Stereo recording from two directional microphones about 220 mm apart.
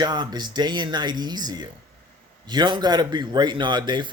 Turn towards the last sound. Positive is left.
turn(degrees=-20)  # may be behind; listen again after turning